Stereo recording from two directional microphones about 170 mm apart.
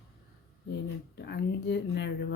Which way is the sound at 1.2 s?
75° left (ahead or behind).